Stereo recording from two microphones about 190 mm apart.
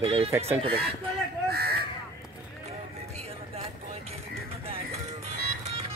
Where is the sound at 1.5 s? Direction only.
55° right (ahead or behind).